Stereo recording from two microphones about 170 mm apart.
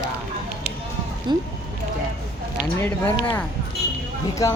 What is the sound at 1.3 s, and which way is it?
Speech, 25° right (ahead or behind).